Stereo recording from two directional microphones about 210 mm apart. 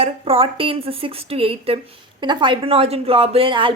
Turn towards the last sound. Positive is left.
turn(degrees=-25)  # may be behind; listen again after turning